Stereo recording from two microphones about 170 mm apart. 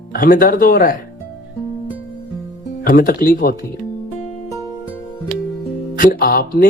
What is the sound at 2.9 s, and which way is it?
Speech, 60° left (ahead or behind).